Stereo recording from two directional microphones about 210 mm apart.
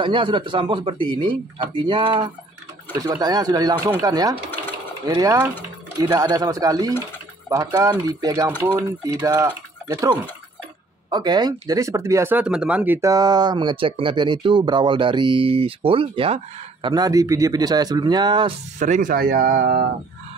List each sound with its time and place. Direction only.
0.0 s speech: 25° right (ahead or behind)
18.8 s speech: 35° right (ahead or behind)